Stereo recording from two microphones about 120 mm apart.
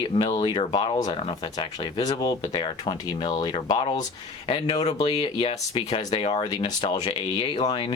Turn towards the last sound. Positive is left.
turn(degrees=45)  # may be behind; listen again after turning